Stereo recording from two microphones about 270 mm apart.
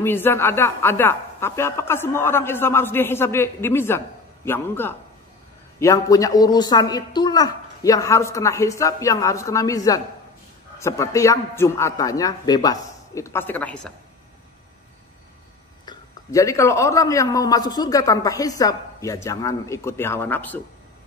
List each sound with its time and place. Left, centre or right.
0.0 s a man's voice: centre
15.8 s a man's voice: centre